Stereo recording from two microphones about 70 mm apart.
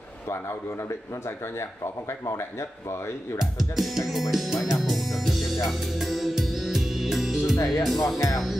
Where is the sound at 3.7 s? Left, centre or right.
Centre.